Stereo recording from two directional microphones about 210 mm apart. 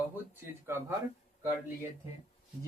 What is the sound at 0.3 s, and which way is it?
Speech, 10° right (ahead or behind).